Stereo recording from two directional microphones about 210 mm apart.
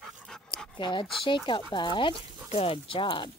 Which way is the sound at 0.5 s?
20° left (ahead or behind).